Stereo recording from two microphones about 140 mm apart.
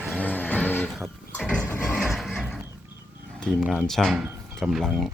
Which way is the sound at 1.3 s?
10° left (ahead or behind).